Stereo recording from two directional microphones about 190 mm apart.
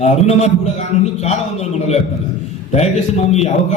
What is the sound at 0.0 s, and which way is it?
Speech, 35° left (ahead or behind).